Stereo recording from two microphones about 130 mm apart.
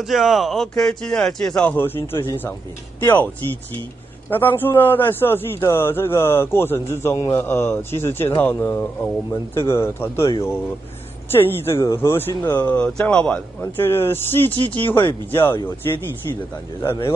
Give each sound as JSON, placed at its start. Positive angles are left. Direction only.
{"t": 0.0, "sound": "speech", "side_deg": 0}
{"t": 4.3, "sound": "a man's voice", "side_deg": 15}
{"t": 11.3, "sound": "a man's voice", "side_deg": 20}